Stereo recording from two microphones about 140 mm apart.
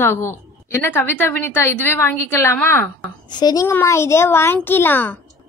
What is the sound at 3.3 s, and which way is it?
A child's voice, 30° left (ahead or behind).